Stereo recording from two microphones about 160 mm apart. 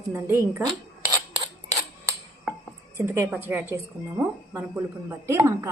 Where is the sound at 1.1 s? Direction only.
30° right (ahead or behind).